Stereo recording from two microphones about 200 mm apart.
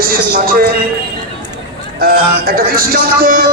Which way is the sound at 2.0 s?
50° right (ahead or behind).